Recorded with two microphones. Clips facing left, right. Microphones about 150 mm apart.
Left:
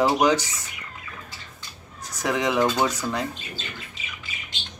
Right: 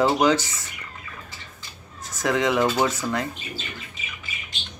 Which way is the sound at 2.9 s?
15° left (ahead or behind).